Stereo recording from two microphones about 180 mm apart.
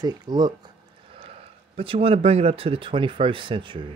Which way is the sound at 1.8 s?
30° right (ahead or behind).